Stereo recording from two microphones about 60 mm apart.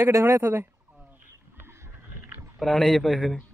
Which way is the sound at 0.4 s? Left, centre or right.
Right.